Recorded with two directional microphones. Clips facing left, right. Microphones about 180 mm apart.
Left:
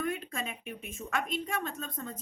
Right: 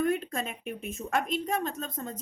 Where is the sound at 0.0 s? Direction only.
40° right (ahead or behind).